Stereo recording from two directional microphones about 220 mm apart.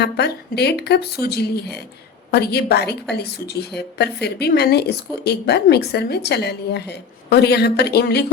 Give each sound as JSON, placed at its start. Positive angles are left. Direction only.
{"t": 0.0, "sound": "speech", "side_deg": 50}